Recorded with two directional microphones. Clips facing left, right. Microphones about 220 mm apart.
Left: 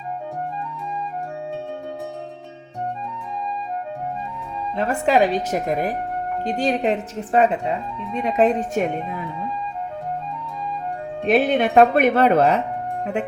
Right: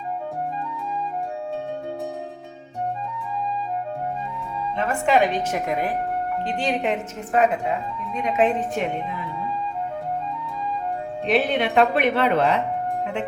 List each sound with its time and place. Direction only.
4.8 s speech: 35° left (ahead or behind)
11.3 s speech: 45° left (ahead or behind)